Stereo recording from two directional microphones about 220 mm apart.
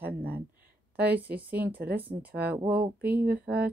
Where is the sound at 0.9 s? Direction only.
5° right (ahead or behind).